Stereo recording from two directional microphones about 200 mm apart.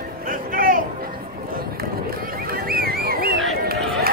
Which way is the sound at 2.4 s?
50° right (ahead or behind).